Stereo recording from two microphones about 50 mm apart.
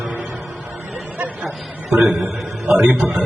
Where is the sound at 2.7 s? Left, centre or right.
Right.